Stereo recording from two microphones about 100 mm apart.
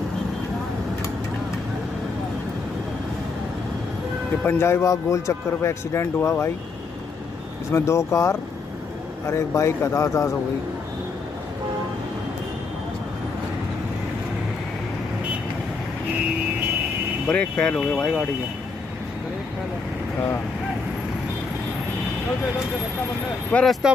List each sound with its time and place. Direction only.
4.5 s a man's voice: 25° left (ahead or behind)
7.7 s a man's voice: 30° left (ahead or behind)
17.3 s speech: 10° left (ahead or behind)
23.5 s speech: 5° left (ahead or behind)